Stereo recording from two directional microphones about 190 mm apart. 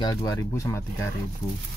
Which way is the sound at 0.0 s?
20° left (ahead or behind).